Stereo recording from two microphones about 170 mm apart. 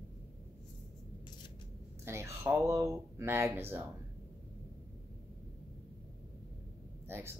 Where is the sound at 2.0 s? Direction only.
15° right (ahead or behind).